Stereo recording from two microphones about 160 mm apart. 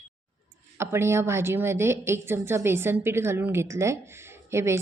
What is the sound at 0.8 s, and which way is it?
A woman's voice, 15° right (ahead or behind).